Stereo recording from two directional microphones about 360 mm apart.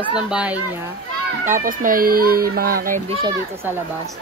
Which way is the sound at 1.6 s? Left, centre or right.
Right.